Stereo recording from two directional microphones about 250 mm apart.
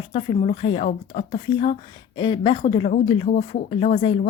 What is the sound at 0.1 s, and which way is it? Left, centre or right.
Speech, left.